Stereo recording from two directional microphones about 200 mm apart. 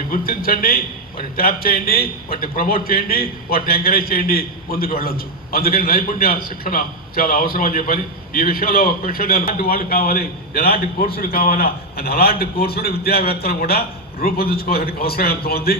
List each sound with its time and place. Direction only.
0.1 s a man's voice: 45° left (ahead or behind)